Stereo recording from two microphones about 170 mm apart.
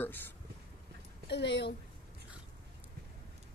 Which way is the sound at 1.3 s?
90° left.